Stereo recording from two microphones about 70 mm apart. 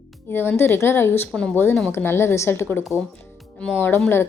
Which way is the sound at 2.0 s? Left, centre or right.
Left.